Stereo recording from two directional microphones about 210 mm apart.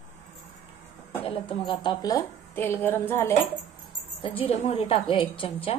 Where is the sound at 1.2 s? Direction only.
25° left (ahead or behind).